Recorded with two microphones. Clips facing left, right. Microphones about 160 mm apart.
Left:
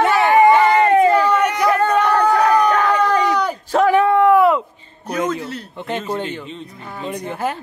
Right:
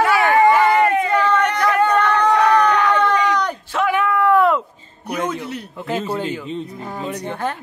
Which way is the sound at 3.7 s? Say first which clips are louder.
Left 6 dB; 35° left (ahead or behind).